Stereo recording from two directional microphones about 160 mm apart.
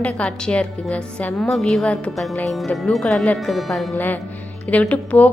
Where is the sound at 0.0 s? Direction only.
5° left (ahead or behind).